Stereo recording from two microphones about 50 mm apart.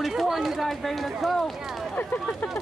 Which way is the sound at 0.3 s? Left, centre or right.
Centre.